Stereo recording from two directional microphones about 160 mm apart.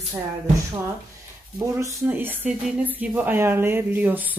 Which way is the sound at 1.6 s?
15° right (ahead or behind).